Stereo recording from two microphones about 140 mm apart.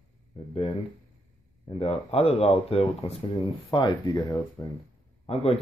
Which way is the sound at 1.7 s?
45° left (ahead or behind).